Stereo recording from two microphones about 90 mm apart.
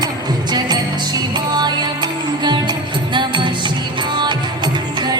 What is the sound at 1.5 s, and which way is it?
Music, 50° right (ahead or behind).